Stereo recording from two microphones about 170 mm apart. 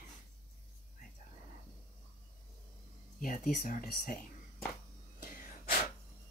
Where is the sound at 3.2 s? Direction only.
50° left (ahead or behind).